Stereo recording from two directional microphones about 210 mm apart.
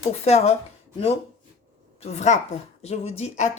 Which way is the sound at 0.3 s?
30° left (ahead or behind).